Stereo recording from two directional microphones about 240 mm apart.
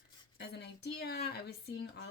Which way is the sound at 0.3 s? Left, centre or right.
Left.